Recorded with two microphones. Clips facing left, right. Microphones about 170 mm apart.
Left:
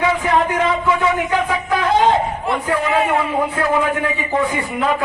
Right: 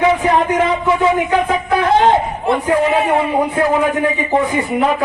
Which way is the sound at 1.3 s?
15° right (ahead or behind).